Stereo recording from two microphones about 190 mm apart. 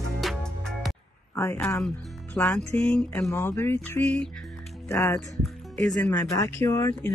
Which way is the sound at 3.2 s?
10° left (ahead or behind).